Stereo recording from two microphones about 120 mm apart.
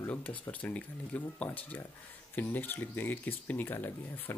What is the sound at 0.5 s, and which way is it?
Speech, 10° left (ahead or behind).